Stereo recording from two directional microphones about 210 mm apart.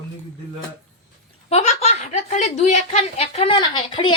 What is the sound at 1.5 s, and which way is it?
Speech, 30° left (ahead or behind).